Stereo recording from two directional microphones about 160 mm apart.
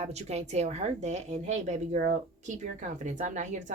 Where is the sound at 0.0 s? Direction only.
45° right (ahead or behind).